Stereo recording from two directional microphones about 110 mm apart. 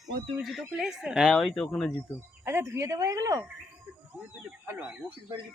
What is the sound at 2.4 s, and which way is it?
Speech, 20° right (ahead or behind).